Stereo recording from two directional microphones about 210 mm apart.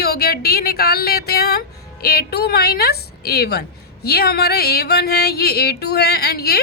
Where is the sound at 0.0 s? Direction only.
45° left (ahead or behind).